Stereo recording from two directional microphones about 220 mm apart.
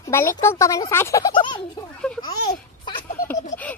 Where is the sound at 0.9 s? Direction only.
10° left (ahead or behind).